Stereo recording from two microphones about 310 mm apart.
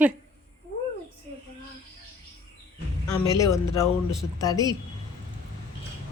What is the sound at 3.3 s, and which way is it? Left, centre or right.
Speech, centre.